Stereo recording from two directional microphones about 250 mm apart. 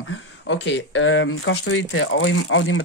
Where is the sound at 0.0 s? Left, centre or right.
Left.